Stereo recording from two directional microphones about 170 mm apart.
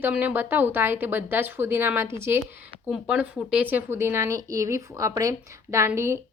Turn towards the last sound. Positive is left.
turn(degrees=-15)  # may be behind; listen again after turning